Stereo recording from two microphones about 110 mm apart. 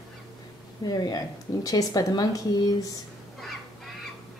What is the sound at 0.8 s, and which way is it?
Speech, 35° left (ahead or behind).